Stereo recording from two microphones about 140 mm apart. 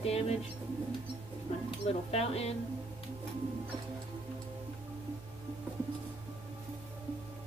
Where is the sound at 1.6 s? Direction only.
45° left (ahead or behind).